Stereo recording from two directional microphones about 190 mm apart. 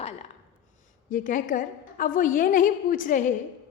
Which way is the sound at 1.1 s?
45° left (ahead or behind).